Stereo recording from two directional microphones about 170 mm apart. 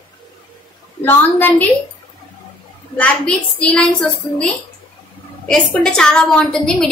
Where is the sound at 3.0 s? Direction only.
5° left (ahead or behind).